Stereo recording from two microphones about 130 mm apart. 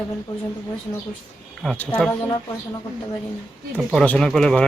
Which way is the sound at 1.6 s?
10° left (ahead or behind).